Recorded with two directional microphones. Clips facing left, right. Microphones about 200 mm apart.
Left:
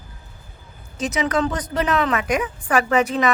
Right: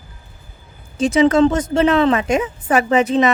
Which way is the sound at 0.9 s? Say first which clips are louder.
Right 9 dB; 30° right (ahead or behind).